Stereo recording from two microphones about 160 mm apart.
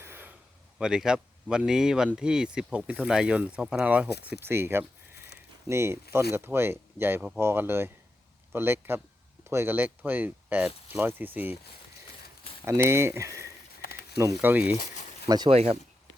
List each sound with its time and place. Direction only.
0.0 s a sound: 15° right (ahead or behind)
0.8 s speech: 5° right (ahead or behind)
12.6 s speech: 15° right (ahead or behind)
15.3 s speech: 25° right (ahead or behind)
15.5 s speech: 40° right (ahead or behind)